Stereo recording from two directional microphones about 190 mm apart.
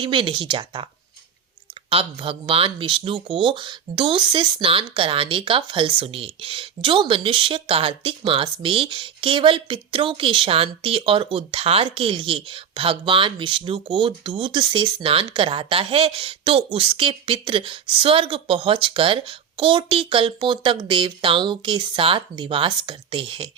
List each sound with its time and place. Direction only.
0.0 s speech: 25° right (ahead or behind)
1.9 s speech: 30° right (ahead or behind)